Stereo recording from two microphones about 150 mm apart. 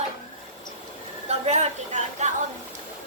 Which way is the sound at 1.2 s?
45° right (ahead or behind).